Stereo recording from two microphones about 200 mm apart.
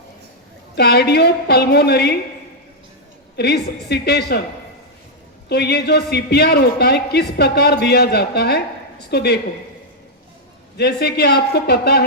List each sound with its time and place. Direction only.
0.8 s a man's voice: 55° left (ahead or behind)
3.3 s a woman's voice: 55° left (ahead or behind)
5.5 s a man's voice: 55° left (ahead or behind)
10.8 s a man's voice: 55° left (ahead or behind)